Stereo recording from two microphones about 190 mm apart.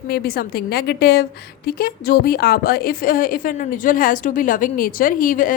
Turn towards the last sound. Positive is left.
turn(degrees=45)  # may be behind; listen again after turning